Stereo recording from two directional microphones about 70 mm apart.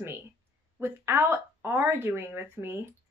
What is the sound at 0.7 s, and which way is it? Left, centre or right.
Speech, right.